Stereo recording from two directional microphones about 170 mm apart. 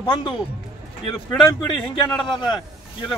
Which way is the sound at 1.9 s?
25° left (ahead or behind).